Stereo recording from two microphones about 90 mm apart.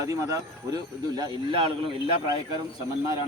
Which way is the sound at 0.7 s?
50° right (ahead or behind).